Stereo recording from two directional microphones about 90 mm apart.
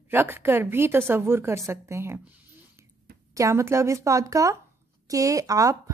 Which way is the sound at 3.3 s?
35° right (ahead or behind).